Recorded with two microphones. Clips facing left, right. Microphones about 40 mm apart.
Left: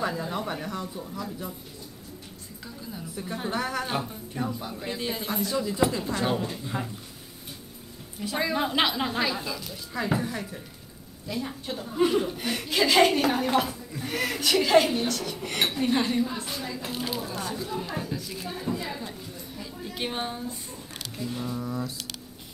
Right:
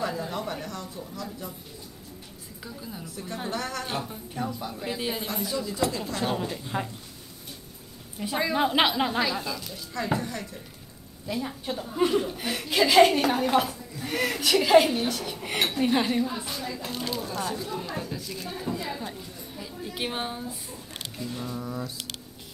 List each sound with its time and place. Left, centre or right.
0.0 s a sound: centre
2.6 s speech: centre
3.4 s speech: centre
6.3 s speech: centre
8.2 s a woman's voice: centre
11.2 s a woman's voice: centre